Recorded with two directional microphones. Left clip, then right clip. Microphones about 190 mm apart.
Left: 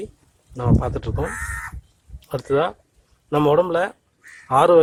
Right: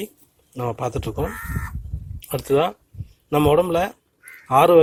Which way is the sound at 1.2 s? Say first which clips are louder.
Left 1 dB; 5° left (ahead or behind).